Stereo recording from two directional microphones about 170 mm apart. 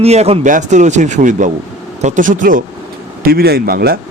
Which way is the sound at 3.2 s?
65° right (ahead or behind).